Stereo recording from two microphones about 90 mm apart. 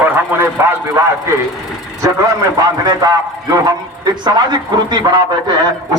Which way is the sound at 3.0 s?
45° right (ahead or behind).